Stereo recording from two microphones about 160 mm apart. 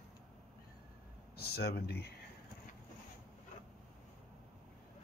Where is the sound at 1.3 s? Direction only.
80° left.